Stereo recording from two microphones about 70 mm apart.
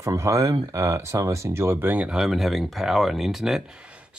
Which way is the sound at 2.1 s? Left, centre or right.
Centre.